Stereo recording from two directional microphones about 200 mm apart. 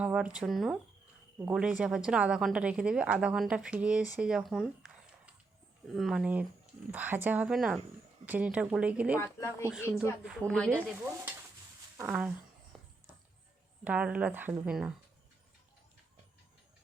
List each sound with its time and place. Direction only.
0.0 s a woman's voice: 5° right (ahead or behind)
4.2 s a sound: 5° right (ahead or behind)
5.9 s a woman's voice: centre (ahead or behind)
9.2 s a woman's voice: 15° left (ahead or behind)
11.9 s a woman's voice: 5° right (ahead or behind)
13.8 s speech: 5° right (ahead or behind)